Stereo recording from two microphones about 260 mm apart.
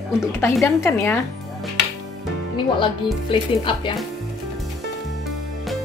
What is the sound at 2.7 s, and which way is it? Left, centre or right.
Speech, centre.